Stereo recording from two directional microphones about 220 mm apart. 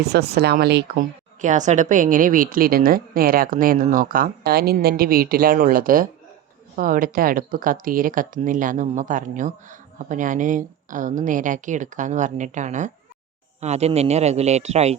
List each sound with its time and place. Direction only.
0.0 s speech: 45° right (ahead or behind)
1.4 s a man's voice: 35° right (ahead or behind)